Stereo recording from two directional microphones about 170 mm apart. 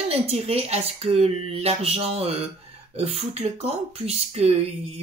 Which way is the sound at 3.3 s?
40° right (ahead or behind).